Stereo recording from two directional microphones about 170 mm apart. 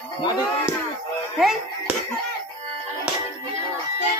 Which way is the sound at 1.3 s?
5° right (ahead or behind).